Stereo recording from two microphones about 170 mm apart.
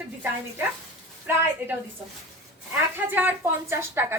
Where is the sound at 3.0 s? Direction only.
10° right (ahead or behind).